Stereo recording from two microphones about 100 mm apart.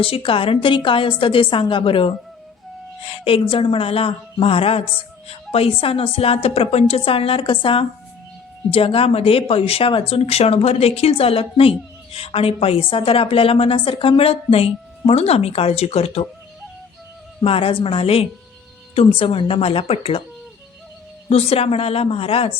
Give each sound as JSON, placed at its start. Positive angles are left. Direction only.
{"t": 0.0, "sound": "a woman's voice", "side_deg": 65}
{"t": 17.4, "sound": "a woman's voice", "side_deg": 70}
{"t": 21.2, "sound": "a woman's voice", "side_deg": 85}